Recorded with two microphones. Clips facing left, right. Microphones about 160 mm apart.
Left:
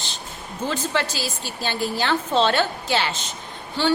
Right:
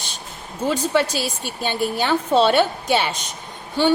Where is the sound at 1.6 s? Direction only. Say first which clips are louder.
Right 2 dB; 10° right (ahead or behind).